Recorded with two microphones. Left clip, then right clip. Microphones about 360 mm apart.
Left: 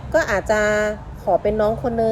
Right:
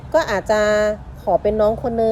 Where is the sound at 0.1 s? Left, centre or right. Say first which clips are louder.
Right 1 dB; right.